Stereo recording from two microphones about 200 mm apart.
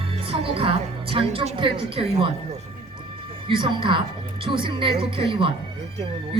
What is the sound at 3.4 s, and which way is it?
A woman's voice, 25° right (ahead or behind).